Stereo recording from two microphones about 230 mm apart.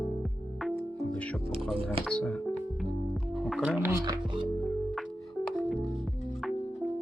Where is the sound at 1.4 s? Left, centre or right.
Right.